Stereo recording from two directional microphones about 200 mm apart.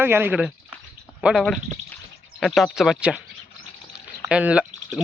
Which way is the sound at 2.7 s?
Centre (ahead or behind).